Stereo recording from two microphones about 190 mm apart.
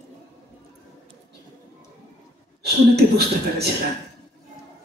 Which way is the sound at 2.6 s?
60° right (ahead or behind).